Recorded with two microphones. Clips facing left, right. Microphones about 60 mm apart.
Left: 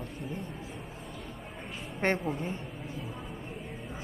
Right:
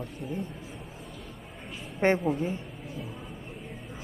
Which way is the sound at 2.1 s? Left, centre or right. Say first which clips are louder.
Right 5 dB; centre.